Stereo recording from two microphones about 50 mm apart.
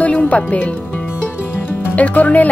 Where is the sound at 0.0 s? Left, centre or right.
Left.